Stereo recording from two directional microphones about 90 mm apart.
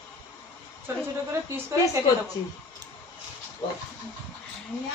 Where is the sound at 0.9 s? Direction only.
25° right (ahead or behind).